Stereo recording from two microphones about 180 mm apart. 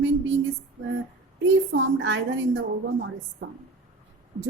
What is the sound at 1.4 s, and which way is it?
A woman's voice, 90° right.